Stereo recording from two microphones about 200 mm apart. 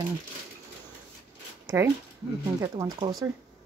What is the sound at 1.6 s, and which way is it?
Speech, 15° right (ahead or behind).